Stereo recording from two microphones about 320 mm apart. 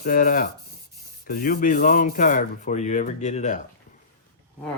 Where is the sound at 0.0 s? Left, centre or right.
Left.